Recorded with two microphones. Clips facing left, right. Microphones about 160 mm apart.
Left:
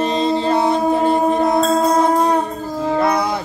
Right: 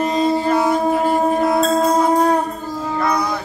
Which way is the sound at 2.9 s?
25° left (ahead or behind).